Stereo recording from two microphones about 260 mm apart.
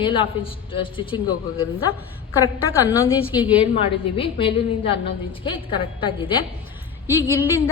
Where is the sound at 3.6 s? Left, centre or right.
Centre.